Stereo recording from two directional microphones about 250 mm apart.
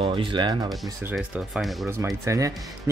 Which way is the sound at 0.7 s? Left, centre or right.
Centre.